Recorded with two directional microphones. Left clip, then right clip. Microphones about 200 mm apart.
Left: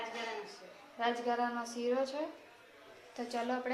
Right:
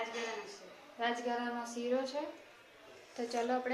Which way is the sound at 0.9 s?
40° left (ahead or behind).